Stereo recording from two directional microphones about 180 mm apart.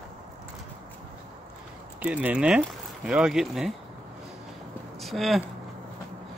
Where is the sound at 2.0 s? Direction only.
5° right (ahead or behind).